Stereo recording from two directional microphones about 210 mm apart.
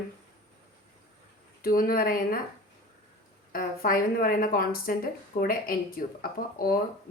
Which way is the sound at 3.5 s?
45° left (ahead or behind).